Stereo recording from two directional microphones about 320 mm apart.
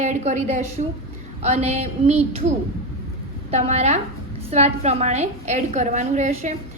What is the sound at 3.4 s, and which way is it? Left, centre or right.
A woman's voice, centre.